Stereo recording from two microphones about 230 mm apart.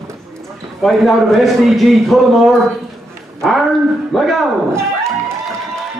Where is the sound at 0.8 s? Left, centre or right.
Centre.